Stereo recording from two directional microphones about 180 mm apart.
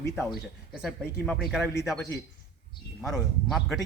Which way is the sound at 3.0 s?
Centre (ahead or behind).